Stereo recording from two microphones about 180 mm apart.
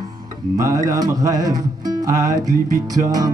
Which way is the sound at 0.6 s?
20° right (ahead or behind).